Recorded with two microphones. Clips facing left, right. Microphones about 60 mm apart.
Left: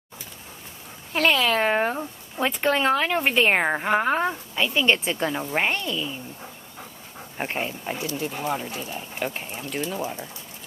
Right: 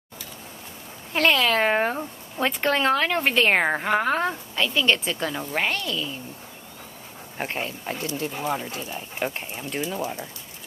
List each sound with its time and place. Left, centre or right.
1.1 s speech: centre
3.9 s speech: centre
4.6 s speech: centre
7.3 s speech: centre